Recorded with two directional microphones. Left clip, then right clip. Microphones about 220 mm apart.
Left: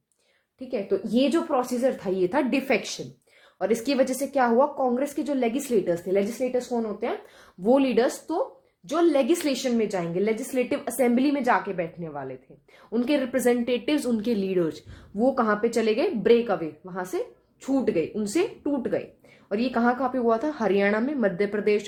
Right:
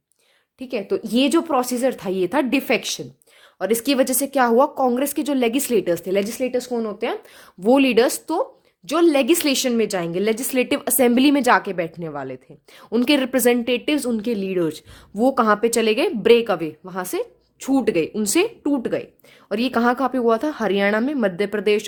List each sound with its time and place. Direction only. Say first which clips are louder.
0.7 s a woman's voice: right 3 dB; 40° right (ahead or behind)